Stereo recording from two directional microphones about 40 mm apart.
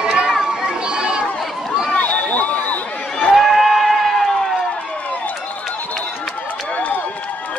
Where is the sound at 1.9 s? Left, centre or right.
Left.